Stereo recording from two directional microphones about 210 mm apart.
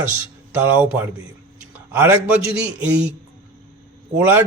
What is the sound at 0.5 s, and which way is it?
Speech, 10° right (ahead or behind).